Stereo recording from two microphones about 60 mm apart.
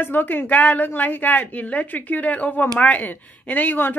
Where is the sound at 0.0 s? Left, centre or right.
Left.